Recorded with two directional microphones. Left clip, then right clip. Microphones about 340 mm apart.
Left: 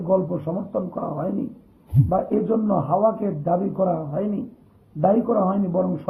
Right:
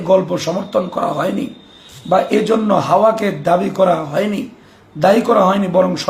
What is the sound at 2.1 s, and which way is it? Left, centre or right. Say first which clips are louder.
Speech: right 9 dB; right.